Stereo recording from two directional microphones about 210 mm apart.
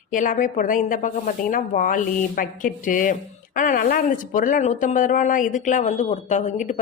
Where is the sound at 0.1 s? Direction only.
40° left (ahead or behind).